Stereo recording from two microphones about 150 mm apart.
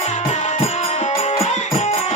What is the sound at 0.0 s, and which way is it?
Music, 45° left (ahead or behind).